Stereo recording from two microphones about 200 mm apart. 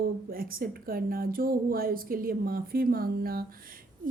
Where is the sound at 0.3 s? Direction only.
45° right (ahead or behind).